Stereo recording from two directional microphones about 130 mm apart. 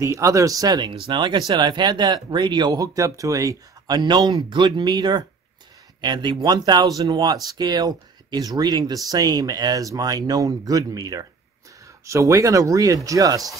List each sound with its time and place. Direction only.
0.0 s speech: 25° right (ahead or behind)